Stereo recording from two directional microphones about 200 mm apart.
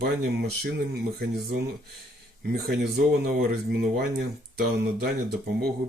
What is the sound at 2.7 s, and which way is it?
Speech, 50° right (ahead or behind).